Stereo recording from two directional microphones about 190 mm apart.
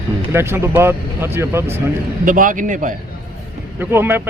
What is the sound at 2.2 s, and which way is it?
Speech, 45° right (ahead or behind).